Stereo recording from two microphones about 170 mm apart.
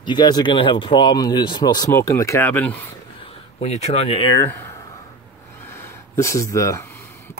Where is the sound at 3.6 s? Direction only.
40° left (ahead or behind).